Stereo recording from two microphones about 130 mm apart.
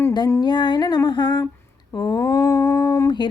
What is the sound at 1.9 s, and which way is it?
Speech, 25° left (ahead or behind).